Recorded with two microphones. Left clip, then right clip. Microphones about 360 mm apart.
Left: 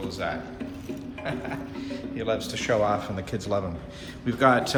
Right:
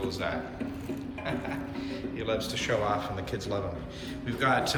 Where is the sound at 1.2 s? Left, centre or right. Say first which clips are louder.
Left 2 dB; centre.